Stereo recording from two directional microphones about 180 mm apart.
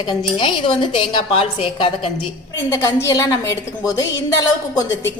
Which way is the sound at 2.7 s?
15° left (ahead or behind).